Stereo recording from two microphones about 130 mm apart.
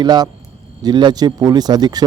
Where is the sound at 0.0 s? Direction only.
35° right (ahead or behind).